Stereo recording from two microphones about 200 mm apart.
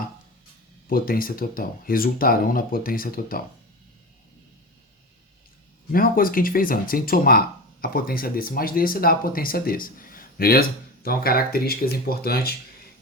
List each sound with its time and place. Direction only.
0.9 s speech: 45° left (ahead or behind)
5.9 s speech: 45° left (ahead or behind)